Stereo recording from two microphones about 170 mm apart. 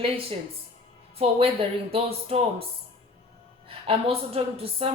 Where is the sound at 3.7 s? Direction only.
35° right (ahead or behind).